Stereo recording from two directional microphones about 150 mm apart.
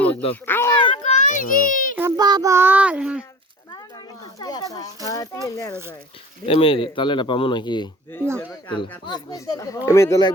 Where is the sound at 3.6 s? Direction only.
25° left (ahead or behind).